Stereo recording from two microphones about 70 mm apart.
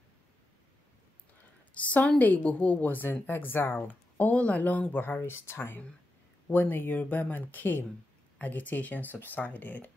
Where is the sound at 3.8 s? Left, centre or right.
Left.